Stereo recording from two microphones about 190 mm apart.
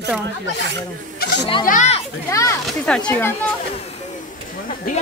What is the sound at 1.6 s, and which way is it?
Speech, 40° left (ahead or behind).